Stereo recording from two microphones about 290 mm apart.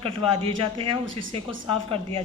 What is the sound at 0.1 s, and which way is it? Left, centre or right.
A woman's voice, centre.